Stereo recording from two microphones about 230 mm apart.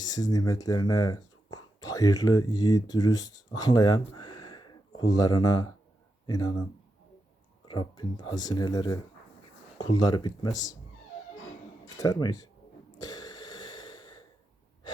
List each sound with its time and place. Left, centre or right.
0.0 s speech: centre
4.2 s a sound: centre
6.2 s speech: centre
7.9 s speech: centre
11.9 s speech: centre
13.0 s a sound: centre